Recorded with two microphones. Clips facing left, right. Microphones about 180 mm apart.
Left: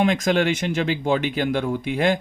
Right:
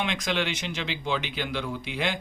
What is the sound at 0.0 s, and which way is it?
Speech, 45° left (ahead or behind).